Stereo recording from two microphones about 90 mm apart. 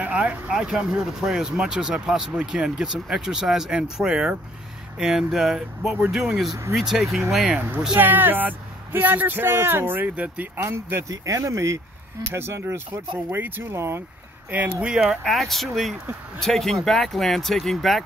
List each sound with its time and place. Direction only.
0.0 s speech: 15° right (ahead or behind)
7.5 s speech: 20° right (ahead or behind)
15.0 s speech: centre (ahead or behind)